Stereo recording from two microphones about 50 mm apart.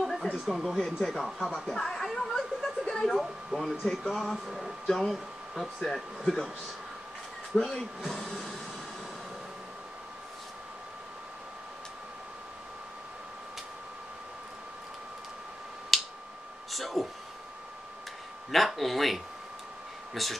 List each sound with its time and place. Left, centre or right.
0.0 s speech: centre
4.1 s speech: centre
7.5 s speech: centre
8.1 s a sound: centre
15.9 s finger snapping: centre
16.7 s a sound: centre
18.5 s speech: centre